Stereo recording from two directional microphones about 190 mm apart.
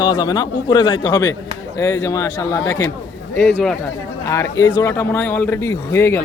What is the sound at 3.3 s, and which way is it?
Speech, 5° left (ahead or behind).